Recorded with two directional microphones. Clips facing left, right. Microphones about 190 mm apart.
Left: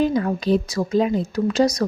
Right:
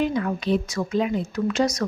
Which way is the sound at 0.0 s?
35° left (ahead or behind).